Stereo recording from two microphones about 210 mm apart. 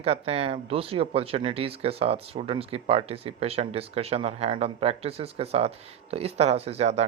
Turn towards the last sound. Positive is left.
turn(degrees=-30)  # may be behind; listen again after turning